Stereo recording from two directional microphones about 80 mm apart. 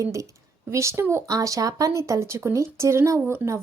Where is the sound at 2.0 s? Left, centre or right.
Right.